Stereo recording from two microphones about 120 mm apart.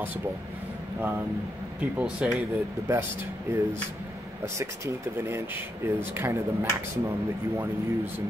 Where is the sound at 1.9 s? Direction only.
10° right (ahead or behind).